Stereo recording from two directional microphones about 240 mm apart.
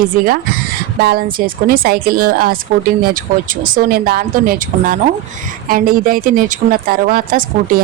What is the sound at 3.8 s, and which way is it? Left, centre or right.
Speech, right.